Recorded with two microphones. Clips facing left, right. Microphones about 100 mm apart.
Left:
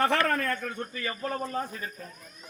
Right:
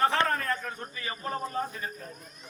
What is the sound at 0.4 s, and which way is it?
Speech, 55° left (ahead or behind).